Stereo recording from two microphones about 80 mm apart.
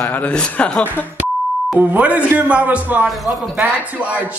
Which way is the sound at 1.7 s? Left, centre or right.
Centre.